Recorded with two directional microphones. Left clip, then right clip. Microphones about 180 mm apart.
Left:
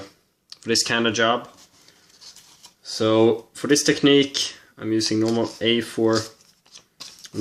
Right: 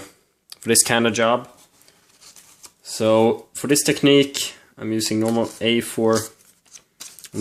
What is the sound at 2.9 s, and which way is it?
Speech, 35° right (ahead or behind).